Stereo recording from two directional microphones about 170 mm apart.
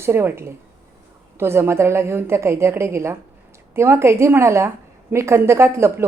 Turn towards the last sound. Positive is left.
turn(degrees=-15)  # may be behind; listen again after turning